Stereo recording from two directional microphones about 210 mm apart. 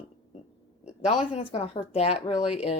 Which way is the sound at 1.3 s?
25° left (ahead or behind).